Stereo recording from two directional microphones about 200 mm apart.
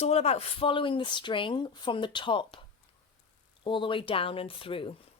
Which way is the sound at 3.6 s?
25° left (ahead or behind).